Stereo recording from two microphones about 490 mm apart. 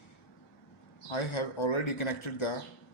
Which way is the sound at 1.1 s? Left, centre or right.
Left.